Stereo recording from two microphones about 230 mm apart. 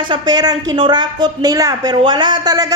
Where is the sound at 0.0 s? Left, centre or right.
Centre.